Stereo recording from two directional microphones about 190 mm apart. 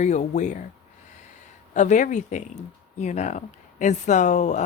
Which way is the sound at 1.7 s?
40° left (ahead or behind).